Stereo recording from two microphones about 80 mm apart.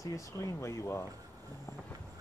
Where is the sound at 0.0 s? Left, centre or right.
Left.